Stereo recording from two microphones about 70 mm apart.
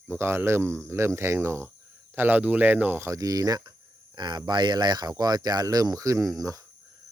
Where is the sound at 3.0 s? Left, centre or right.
Right.